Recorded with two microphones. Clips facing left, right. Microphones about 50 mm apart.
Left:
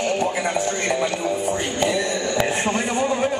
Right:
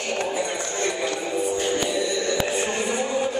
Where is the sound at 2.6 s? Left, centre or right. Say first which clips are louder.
Left 4 dB; left.